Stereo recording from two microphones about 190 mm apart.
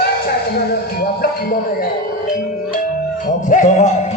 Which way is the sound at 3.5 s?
40° left (ahead or behind).